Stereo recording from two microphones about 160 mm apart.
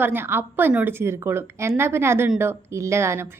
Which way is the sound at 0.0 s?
15° right (ahead or behind).